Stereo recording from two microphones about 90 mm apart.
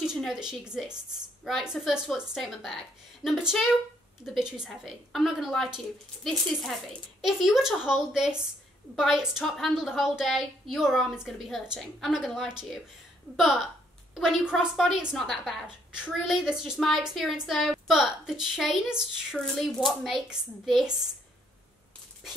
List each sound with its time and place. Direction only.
0.3 s a woman's voice: 5° right (ahead or behind)
19.3 s a woman's voice: 5° left (ahead or behind)